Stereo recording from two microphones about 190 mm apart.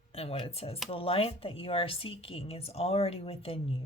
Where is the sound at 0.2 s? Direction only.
30° left (ahead or behind).